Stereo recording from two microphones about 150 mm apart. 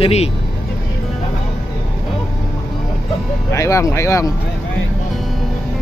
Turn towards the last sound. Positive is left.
turn(degrees=20)  # may be behind; listen again after turning